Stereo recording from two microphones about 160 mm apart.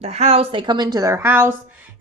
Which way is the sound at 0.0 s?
40° right (ahead or behind).